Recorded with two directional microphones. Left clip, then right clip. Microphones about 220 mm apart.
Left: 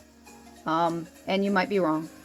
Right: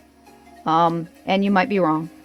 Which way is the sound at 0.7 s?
40° right (ahead or behind).